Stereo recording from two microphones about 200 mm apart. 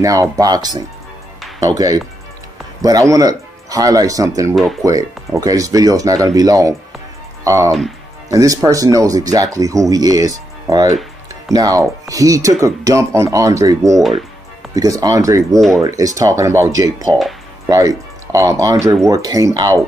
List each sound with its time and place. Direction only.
0.0 s speech: 15° right (ahead or behind)